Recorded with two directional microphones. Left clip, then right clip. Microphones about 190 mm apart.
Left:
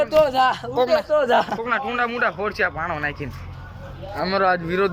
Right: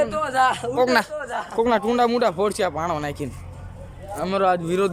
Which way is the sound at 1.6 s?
35° right (ahead or behind).